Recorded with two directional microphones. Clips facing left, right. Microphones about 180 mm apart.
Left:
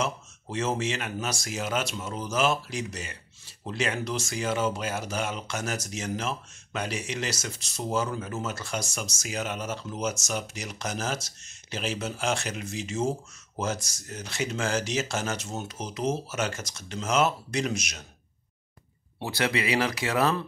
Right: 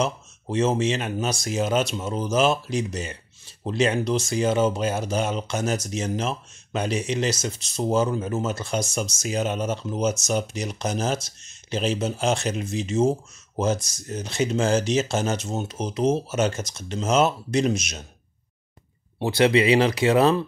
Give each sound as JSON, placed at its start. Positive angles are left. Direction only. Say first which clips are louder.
{"t": 0.0, "sound": "speech", "louder": "right 5 dB", "side_deg": -20}
{"t": 19.1, "sound": "speech", "louder": "right 9 dB", "side_deg": -20}